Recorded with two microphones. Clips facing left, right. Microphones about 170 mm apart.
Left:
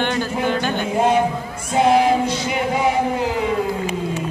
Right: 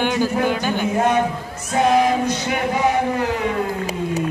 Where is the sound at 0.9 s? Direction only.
25° left (ahead or behind).